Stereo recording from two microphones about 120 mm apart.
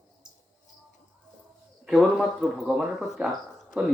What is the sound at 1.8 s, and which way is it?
Speech, 5° right (ahead or behind).